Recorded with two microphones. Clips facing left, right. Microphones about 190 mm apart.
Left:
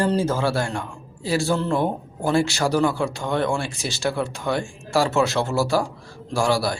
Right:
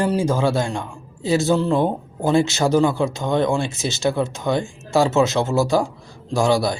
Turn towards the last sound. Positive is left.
turn(degrees=-20)  # may be behind; listen again after turning